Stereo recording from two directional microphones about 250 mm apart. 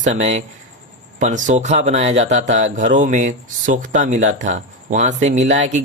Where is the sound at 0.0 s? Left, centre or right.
Right.